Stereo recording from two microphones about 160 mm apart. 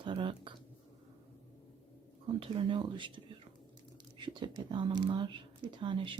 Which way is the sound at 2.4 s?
30° right (ahead or behind).